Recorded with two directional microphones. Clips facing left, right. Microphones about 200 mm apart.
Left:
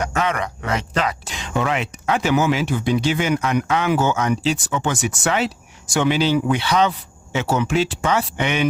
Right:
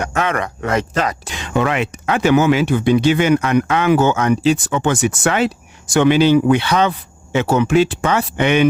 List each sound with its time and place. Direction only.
0.2 s speech: 55° right (ahead or behind)